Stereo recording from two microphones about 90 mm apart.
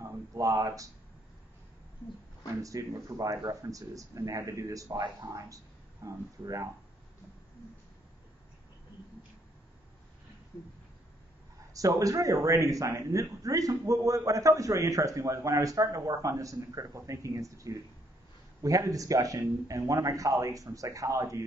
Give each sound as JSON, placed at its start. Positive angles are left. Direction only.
{"t": 0.0, "sound": "speech", "side_deg": -35}
{"t": 2.6, "sound": "a man's voice", "side_deg": -40}
{"t": 4.8, "sound": "speech", "side_deg": -55}
{"t": 6.0, "sound": "a man's voice", "side_deg": -40}
{"t": 11.7, "sound": "a man's voice", "side_deg": -40}